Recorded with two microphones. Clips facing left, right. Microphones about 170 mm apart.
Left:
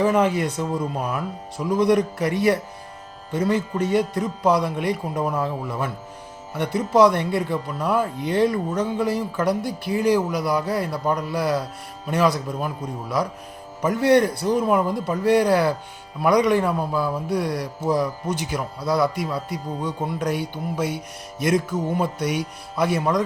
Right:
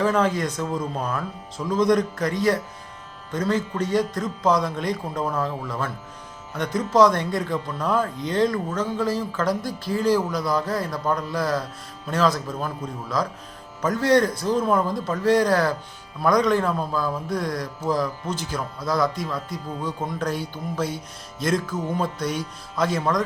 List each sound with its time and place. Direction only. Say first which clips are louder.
0.0 s speech: left 2 dB; 15° left (ahead or behind)
3.3 s speech: left 2 dB; 15° left (ahead or behind)
20.8 s music: left 2 dB; 65° left (ahead or behind)
21.4 s speech: left 3 dB; 15° left (ahead or behind)